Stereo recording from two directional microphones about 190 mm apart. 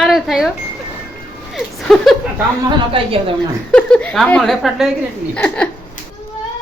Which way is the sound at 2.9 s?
30° right (ahead or behind).